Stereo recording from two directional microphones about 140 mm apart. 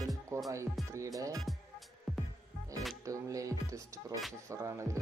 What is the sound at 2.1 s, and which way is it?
Music, centre (ahead or behind).